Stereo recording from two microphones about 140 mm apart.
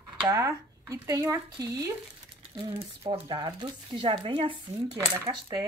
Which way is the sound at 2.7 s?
40° right (ahead or behind).